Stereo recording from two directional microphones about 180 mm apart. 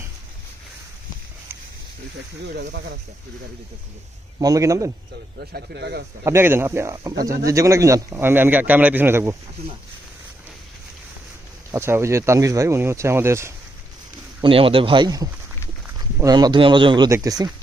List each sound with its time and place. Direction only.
2.6 s speech: 70° right (ahead or behind)
4.4 s speech: 20° right (ahead or behind)
5.4 s speech: 65° right (ahead or behind)
6.2 s speech: 15° right (ahead or behind)
11.7 s speech: 15° right (ahead or behind)
14.4 s speech: 30° right (ahead or behind)